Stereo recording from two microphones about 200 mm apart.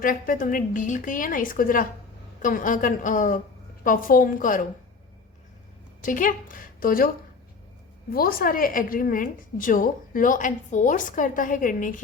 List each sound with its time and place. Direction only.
0.0 s a woman's voice: 45° left (ahead or behind)
6.0 s a woman's voice: 40° left (ahead or behind)
8.1 s a woman's voice: 45° left (ahead or behind)